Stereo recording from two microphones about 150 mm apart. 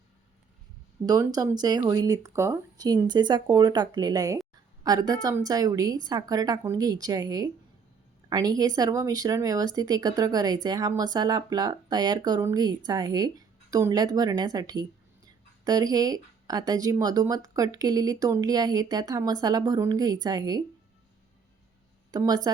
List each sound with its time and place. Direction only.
1.0 s speech: 25° right (ahead or behind)
22.1 s speech: 25° right (ahead or behind)